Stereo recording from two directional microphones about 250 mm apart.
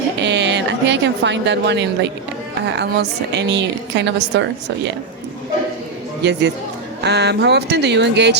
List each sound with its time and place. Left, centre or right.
0.2 s a sound: right
2.6 s a woman's voice: right
7.0 s a woman's voice: right